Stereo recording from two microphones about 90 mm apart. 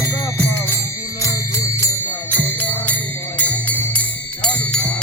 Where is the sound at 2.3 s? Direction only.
20° left (ahead or behind).